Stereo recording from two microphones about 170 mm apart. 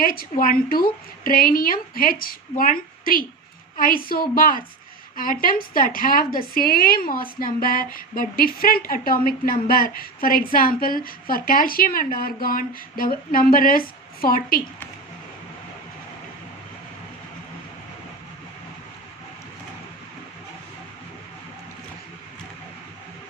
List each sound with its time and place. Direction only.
0.0 s a woman's voice: 60° left (ahead or behind)